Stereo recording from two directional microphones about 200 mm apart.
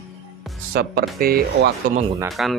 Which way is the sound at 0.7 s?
50° right (ahead or behind).